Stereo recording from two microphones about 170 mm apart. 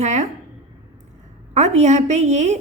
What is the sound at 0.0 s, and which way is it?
Speech, 40° right (ahead or behind).